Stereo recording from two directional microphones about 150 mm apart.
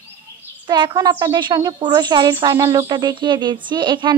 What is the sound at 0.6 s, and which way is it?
A woman's voice, 30° right (ahead or behind).